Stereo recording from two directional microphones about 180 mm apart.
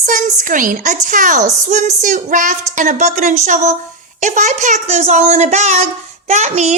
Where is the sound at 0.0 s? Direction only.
45° right (ahead or behind).